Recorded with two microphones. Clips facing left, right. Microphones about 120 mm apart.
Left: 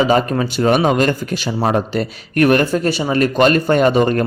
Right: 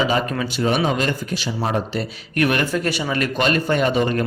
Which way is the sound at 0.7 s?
50° left (ahead or behind).